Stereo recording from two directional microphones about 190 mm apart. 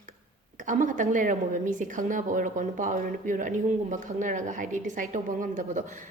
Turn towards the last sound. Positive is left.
turn(degrees=-40)  # may be behind; listen again after turning